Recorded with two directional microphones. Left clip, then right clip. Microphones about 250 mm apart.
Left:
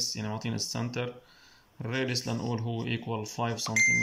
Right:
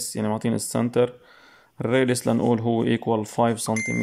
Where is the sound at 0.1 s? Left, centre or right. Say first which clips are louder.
Right 10 dB; right.